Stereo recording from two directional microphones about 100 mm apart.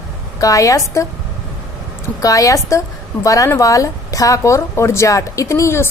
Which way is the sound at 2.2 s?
35° left (ahead or behind).